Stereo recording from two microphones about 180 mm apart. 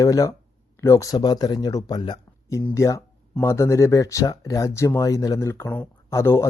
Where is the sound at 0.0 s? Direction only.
20° left (ahead or behind).